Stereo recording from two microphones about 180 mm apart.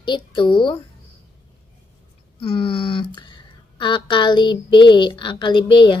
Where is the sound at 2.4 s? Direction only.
30° left (ahead or behind).